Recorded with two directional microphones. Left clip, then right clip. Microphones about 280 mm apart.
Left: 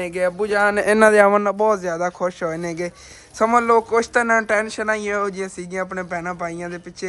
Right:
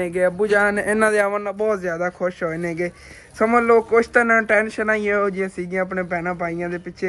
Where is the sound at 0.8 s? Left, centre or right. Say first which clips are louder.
Left 5 dB; left.